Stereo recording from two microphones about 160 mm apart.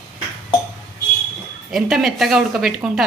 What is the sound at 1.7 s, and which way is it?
A woman's voice, centre (ahead or behind).